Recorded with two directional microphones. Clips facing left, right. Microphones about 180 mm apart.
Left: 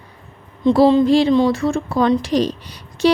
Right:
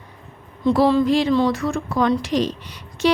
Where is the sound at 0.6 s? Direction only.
20° left (ahead or behind).